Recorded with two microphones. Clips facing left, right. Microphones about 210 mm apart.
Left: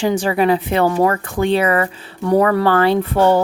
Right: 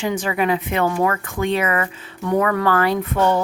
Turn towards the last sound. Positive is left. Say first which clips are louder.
# left 5 dB
turn(degrees=30)  # may be behind; listen again after turning